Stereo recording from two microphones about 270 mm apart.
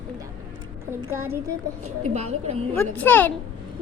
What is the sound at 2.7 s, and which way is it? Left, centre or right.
Speech, centre.